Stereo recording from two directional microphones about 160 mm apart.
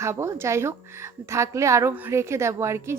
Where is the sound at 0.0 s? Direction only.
15° right (ahead or behind).